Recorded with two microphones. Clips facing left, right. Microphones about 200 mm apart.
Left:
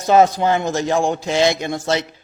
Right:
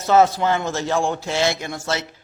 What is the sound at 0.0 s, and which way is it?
Speech, 15° left (ahead or behind).